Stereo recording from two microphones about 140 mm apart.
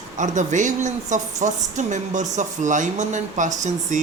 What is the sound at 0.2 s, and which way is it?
Speech, 60° right (ahead or behind).